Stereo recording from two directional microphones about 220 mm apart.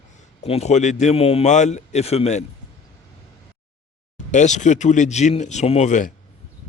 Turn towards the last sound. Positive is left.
turn(degrees=35)  # may be behind; listen again after turning